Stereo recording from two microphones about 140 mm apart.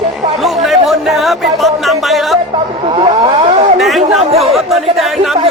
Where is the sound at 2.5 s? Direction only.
40° right (ahead or behind).